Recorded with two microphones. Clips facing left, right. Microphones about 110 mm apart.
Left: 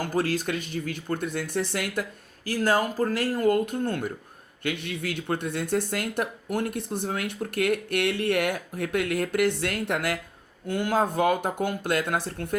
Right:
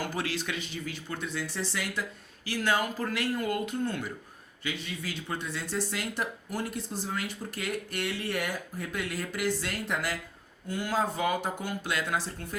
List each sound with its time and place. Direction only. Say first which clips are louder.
0.0 s speech: left 7 dB; 45° left (ahead or behind)